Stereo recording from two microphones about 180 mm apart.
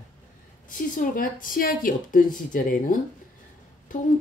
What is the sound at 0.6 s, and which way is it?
Speech, 50° left (ahead or behind).